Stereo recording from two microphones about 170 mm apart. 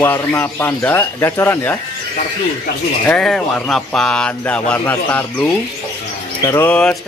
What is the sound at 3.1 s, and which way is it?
Speech, 5° left (ahead or behind).